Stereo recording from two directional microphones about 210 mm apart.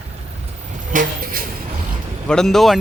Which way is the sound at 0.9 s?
40° right (ahead or behind).